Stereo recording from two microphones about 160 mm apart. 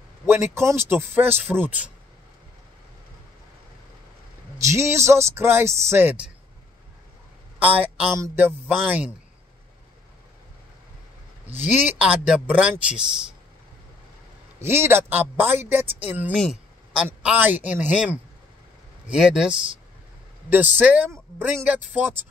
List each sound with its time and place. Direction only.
0.3 s speech: 15° right (ahead or behind)
4.6 s speech: 20° right (ahead or behind)
7.5 s a woman's voice: 10° right (ahead or behind)
11.5 s speech: 10° right (ahead or behind)
14.6 s a man's voice: 15° right (ahead or behind)